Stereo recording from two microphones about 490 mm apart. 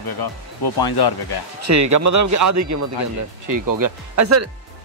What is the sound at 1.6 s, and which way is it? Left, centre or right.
Speech, right.